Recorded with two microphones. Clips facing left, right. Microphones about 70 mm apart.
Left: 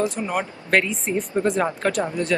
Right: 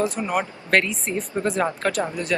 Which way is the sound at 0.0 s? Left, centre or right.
Centre.